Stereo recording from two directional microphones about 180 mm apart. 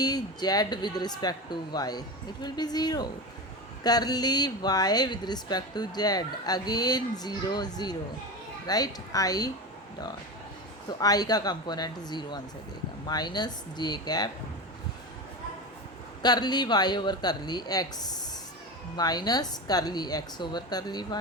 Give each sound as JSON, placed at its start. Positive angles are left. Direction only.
{"t": 0.0, "sound": "speech", "side_deg": 20}
{"t": 10.8, "sound": "speech", "side_deg": 20}
{"t": 16.2, "sound": "speech", "side_deg": 25}